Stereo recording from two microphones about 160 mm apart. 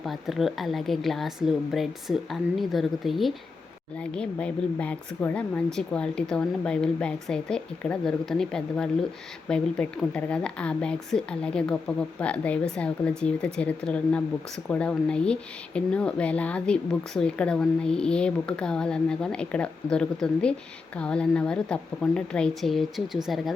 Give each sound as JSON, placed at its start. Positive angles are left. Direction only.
{"t": 0.0, "sound": "a woman's voice", "side_deg": 0}